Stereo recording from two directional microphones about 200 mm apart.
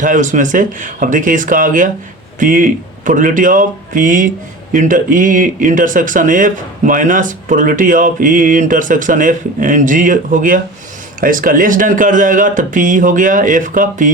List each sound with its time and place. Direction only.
0.0 s speech: 40° right (ahead or behind)